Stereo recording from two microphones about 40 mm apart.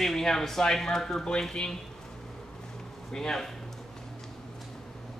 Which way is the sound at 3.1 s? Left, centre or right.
Centre.